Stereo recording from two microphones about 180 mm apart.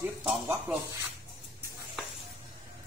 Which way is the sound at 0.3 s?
Centre (ahead or behind).